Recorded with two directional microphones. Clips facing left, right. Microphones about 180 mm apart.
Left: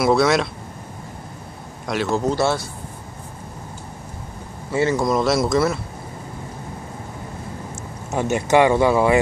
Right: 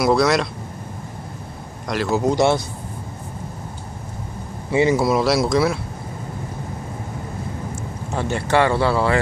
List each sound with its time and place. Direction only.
0.0 s speech: centre (ahead or behind)
1.9 s speech: centre (ahead or behind)
2.2 s speech: 15° right (ahead or behind)
4.7 s speech: 10° right (ahead or behind)
8.1 s speech: 15° left (ahead or behind)